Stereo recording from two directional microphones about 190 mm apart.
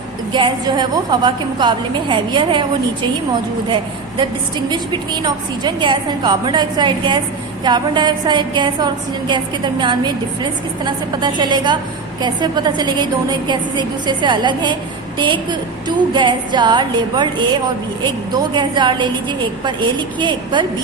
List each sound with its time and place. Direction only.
0.3 s a woman's voice: 25° right (ahead or behind)
4.7 s a woman's voice: 25° right (ahead or behind)